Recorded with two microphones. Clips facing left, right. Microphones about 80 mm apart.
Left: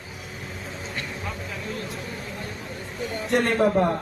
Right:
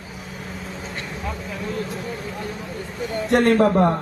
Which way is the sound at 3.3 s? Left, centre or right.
Right.